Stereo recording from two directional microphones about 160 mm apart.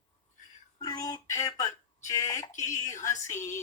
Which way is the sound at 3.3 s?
50° left (ahead or behind).